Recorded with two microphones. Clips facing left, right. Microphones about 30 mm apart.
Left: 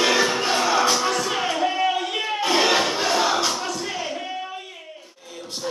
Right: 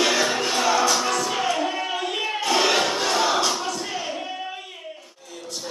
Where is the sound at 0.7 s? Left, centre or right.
Left; by 3.6 s centre.